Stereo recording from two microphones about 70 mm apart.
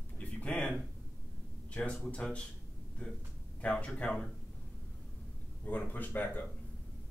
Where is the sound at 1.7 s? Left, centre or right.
Centre.